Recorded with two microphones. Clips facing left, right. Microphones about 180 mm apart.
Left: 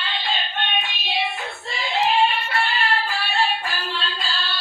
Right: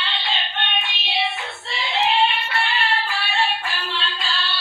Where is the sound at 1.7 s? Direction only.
45° left (ahead or behind).